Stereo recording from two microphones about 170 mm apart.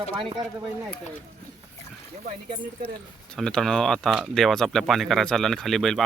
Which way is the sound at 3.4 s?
5° left (ahead or behind).